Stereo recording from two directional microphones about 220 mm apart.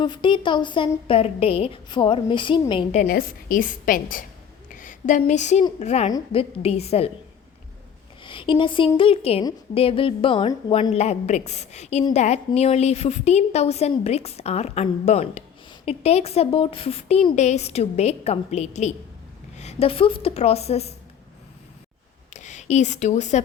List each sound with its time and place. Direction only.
0.0 s a woman's voice: 20° left (ahead or behind)
8.2 s a woman's voice: 20° left (ahead or behind)
22.3 s speech: 35° left (ahead or behind)